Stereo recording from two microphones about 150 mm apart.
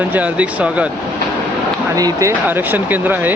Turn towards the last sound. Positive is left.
turn(degrees=-10)  # may be behind; listen again after turning